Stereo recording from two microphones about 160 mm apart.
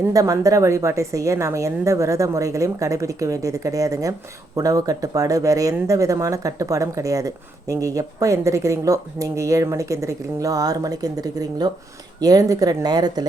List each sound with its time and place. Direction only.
0.0 s speech: 20° right (ahead or behind)